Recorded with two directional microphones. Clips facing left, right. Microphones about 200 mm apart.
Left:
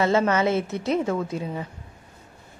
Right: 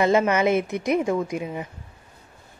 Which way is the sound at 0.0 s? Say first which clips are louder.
Right 1 dB; 15° right (ahead or behind).